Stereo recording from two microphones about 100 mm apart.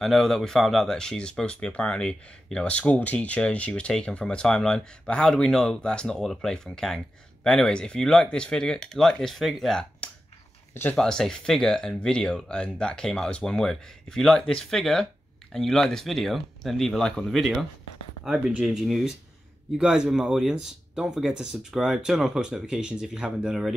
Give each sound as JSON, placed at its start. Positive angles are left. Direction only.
{"t": 0.0, "sound": "speech", "side_deg": 0}
{"t": 10.7, "sound": "speech", "side_deg": 20}
{"t": 11.0, "sound": "speech", "side_deg": 5}